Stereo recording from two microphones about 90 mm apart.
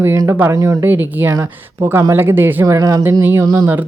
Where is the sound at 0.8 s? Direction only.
20° right (ahead or behind).